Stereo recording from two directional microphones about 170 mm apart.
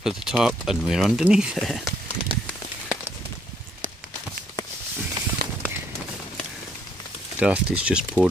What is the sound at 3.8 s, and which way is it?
Walk, 50° right (ahead or behind).